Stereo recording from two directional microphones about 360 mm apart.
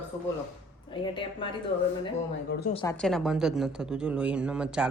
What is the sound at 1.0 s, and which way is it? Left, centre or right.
Speech, centre.